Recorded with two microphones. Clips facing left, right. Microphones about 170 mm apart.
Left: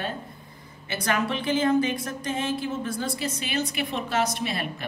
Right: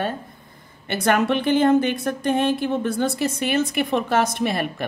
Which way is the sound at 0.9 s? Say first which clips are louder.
Right 7 dB; 65° right (ahead or behind).